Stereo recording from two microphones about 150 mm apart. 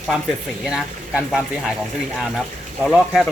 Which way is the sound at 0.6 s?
Centre (ahead or behind).